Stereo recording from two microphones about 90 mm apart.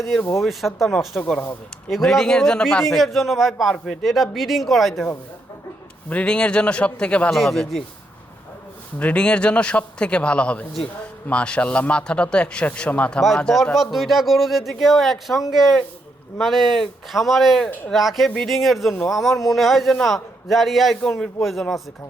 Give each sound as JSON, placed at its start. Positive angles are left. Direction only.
{"t": 0.3, "sound": "a man's voice", "side_deg": 0}
{"t": 1.2, "sound": "a man's voice", "side_deg": 15}
{"t": 1.9, "sound": "a man's voice", "side_deg": 0}
{"t": 2.8, "sound": "a man's voice", "side_deg": 0}
{"t": 6.1, "sound": "a man's voice", "side_deg": 15}
{"t": 7.3, "sound": "a man's voice", "side_deg": 0}
{"t": 9.0, "sound": "a man's voice", "side_deg": 15}
{"t": 13.2, "sound": "a man's voice", "side_deg": 0}